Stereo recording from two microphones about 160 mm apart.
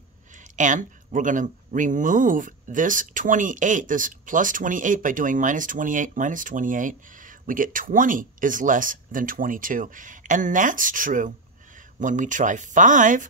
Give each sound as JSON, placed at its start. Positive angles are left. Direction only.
{"t": 0.4, "sound": "speech", "side_deg": -50}